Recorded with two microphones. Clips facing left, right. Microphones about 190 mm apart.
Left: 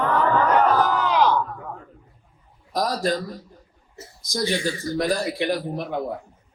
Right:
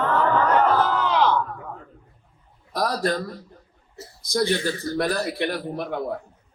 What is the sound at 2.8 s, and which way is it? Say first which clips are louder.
Speech: left 1 dB; 55° right (ahead or behind).